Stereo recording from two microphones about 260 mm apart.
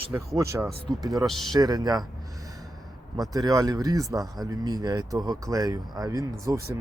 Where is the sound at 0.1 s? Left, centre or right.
Centre.